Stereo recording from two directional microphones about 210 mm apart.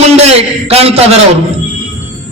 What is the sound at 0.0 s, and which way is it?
A man's voice, 30° right (ahead or behind).